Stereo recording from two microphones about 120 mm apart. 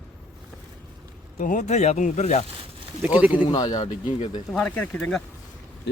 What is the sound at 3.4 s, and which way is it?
Speech, 35° left (ahead or behind).